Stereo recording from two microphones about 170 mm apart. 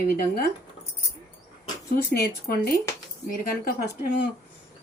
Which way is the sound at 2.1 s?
65° left (ahead or behind).